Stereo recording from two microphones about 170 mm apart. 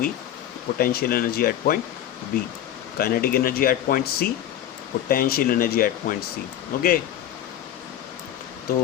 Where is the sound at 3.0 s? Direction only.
60° left (ahead or behind).